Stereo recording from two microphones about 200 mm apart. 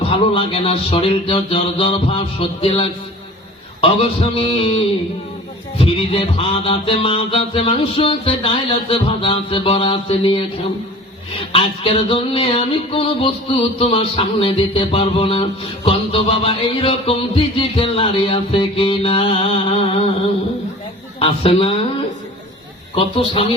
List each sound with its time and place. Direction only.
0.0 s music: 30° left (ahead or behind)
11.5 s music: 25° left (ahead or behind)
21.2 s music: 30° left (ahead or behind)
23.0 s music: 25° left (ahead or behind)